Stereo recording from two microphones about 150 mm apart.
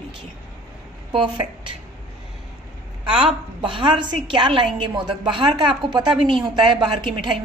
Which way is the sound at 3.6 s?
35° right (ahead or behind).